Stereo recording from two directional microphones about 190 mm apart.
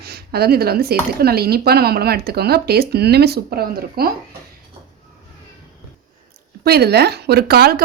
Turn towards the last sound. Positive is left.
turn(degrees=-55)  # may be behind; listen again after turning